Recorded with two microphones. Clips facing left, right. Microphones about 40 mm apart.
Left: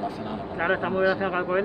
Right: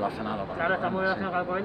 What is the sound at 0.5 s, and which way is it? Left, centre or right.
Speech, left.